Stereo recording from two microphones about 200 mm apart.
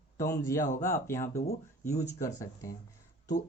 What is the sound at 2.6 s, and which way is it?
Speech, 15° left (ahead or behind).